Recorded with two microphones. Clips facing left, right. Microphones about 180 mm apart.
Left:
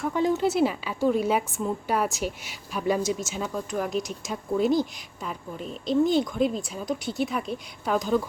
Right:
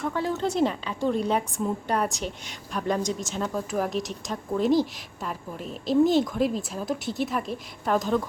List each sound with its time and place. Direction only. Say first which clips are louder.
0.1 s a woman's voice: left 4 dB; 15° left (ahead or behind)
0.4 s a woman's voice: left 1 dB; 5° left (ahead or behind)